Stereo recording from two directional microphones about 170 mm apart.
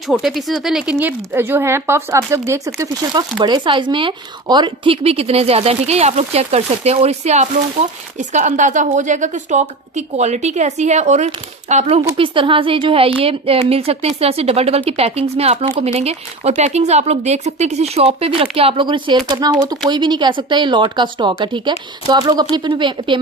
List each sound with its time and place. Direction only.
0.0 s speech: centre (ahead or behind); by 23.1 s 30° right (ahead or behind)